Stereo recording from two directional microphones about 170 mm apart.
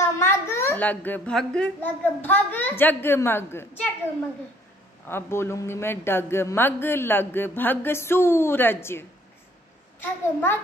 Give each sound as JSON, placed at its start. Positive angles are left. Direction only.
{"t": 0.0, "sound": "a woman's voice", "side_deg": 15}
{"t": 5.0, "sound": "a man's voice", "side_deg": 15}